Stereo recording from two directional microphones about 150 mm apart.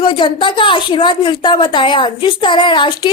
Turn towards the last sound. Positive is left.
turn(degrees=30)  # may be behind; listen again after turning